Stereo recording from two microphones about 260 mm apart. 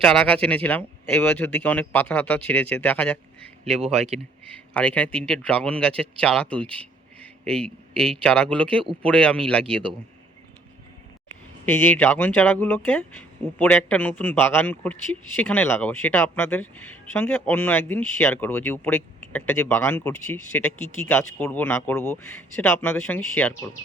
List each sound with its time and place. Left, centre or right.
0.0 s speech: centre
3.8 s speech: right
4.5 s speech: centre
11.6 s a man's voice: centre